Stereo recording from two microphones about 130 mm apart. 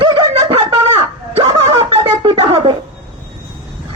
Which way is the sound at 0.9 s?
45° right (ahead or behind).